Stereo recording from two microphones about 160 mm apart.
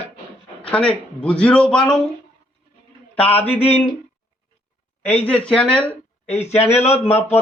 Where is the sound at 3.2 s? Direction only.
40° left (ahead or behind).